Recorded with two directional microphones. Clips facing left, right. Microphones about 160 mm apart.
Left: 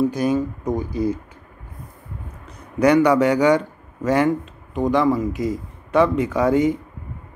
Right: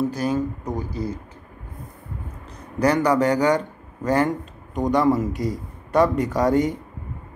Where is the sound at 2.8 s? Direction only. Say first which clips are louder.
Left 4 dB; 35° right (ahead or behind).